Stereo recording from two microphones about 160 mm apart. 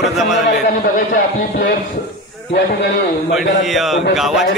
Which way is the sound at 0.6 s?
60° left (ahead or behind).